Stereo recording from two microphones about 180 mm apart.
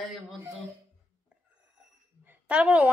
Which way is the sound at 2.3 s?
5° right (ahead or behind).